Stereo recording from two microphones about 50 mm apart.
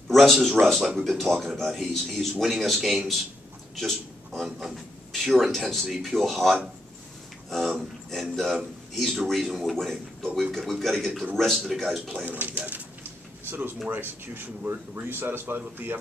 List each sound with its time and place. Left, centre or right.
0.1 s a man's voice: centre
4.5 s speech: centre
5.1 s a man's voice: centre
12.3 s speech: right
13.8 s speech: right